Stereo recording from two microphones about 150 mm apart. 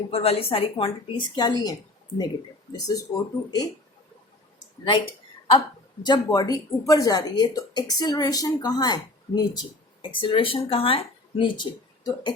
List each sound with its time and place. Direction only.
0.1 s a woman's voice: 40° left (ahead or behind)
2.7 s a woman's voice: 25° left (ahead or behind)
5.5 s a woman's voice: 30° left (ahead or behind)